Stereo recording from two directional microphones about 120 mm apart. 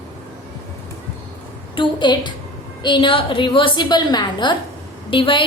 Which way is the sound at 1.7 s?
40° left (ahead or behind).